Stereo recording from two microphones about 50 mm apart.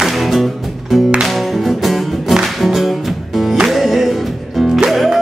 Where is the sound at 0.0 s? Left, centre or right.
Centre.